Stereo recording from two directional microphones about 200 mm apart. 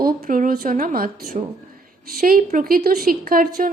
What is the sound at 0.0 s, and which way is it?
A woman's voice, 45° right (ahead or behind).